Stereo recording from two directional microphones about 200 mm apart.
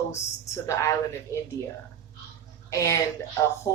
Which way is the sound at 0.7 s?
15° left (ahead or behind).